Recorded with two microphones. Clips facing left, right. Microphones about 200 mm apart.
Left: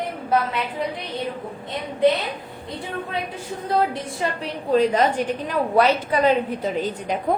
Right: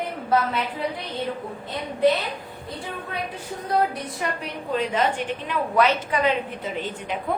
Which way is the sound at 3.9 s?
30° left (ahead or behind).